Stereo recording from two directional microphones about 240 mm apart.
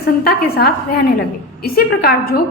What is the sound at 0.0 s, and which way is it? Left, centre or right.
A woman's voice, left.